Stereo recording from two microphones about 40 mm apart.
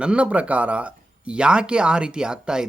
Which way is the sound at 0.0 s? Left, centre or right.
Right.